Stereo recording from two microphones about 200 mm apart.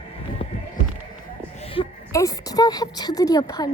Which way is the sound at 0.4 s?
30° left (ahead or behind).